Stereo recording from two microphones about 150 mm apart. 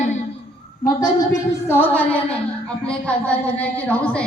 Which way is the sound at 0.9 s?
25° left (ahead or behind).